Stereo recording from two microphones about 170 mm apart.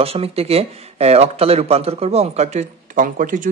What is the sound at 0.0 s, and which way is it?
Speech, 35° right (ahead or behind).